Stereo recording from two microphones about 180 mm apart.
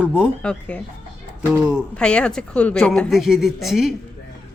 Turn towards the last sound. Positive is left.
turn(degrees=0)  # may be behind; listen again after turning